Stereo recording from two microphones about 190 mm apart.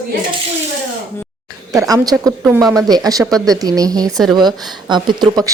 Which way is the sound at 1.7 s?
20° right (ahead or behind).